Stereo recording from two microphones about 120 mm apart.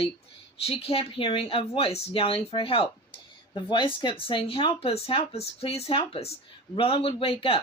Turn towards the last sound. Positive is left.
turn(degrees=50)  # may be behind; listen again after turning